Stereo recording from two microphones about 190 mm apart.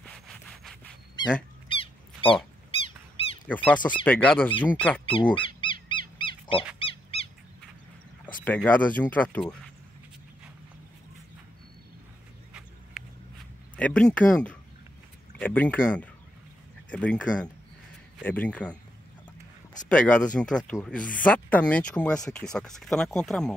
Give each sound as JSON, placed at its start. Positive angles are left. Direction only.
{"t": 0.0, "sound": "wood", "side_deg": 5}
{"t": 1.2, "sound": "goose", "side_deg": 20}
{"t": 1.7, "sound": "a sound", "side_deg": 30}
{"t": 3.4, "sound": "speech", "side_deg": 10}
{"t": 5.0, "sound": "speech", "side_deg": 25}
{"t": 5.6, "sound": "wild animals", "side_deg": 25}
{"t": 6.8, "sound": "dog", "side_deg": 30}
{"t": 8.6, "sound": "speech", "side_deg": 10}
{"t": 13.7, "sound": "speech", "side_deg": 5}
{"t": 19.9, "sound": "speech", "side_deg": 5}